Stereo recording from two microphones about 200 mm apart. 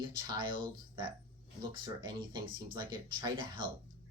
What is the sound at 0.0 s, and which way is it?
Speech, 25° right (ahead or behind).